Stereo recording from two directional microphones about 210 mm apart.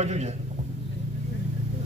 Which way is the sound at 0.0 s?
30° right (ahead or behind).